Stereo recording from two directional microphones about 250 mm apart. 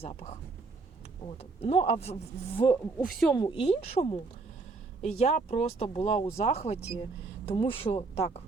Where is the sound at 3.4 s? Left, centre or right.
Left.